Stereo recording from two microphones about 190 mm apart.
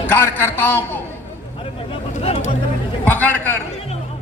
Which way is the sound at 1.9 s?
35° left (ahead or behind).